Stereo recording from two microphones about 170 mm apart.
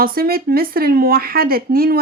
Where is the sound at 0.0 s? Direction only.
60° right (ahead or behind).